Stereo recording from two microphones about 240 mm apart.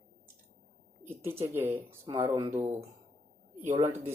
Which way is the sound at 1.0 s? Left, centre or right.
Centre.